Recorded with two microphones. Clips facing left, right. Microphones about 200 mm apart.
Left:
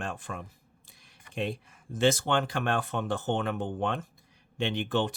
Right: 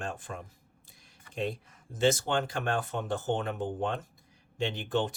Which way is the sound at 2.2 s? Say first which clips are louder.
Left 2 dB; 65° left (ahead or behind).